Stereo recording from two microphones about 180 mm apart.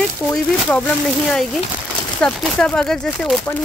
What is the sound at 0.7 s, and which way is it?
Speech, 5° left (ahead or behind).